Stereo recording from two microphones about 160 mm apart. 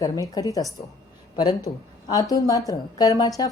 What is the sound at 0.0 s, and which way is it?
A woman's voice, 20° left (ahead or behind).